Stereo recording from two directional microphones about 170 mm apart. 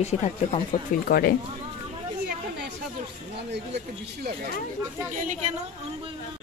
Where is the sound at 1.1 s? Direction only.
65° left (ahead or behind).